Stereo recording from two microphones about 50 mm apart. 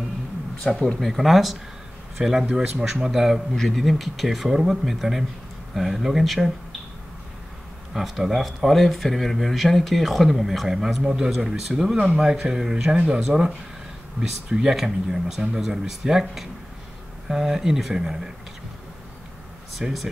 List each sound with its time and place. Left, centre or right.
0.9 s speech: centre
7.9 s speech: centre
14.5 s speech: centre
19.8 s speech: centre